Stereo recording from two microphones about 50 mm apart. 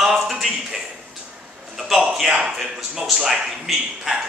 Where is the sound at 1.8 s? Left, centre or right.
Centre.